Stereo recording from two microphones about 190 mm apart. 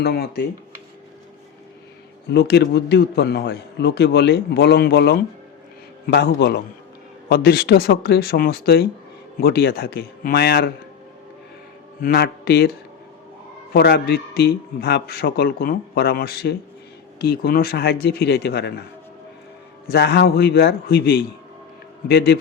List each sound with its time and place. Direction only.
0.0 s a man's voice: 60° left (ahead or behind)
2.3 s a man's voice: 60° left (ahead or behind)
12.0 s a man's voice: 55° left (ahead or behind)
13.7 s a man's voice: 55° left (ahead or behind)
19.9 s a man's voice: 60° left (ahead or behind)